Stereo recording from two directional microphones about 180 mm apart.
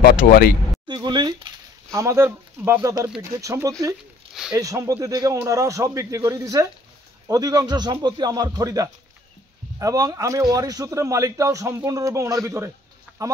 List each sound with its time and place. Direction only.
0.0 s speech: 60° left (ahead or behind)
0.8 s a man's voice: 25° right (ahead or behind)
4.3 s a sound: 5° right (ahead or behind)
4.6 s a man's voice: 20° right (ahead or behind)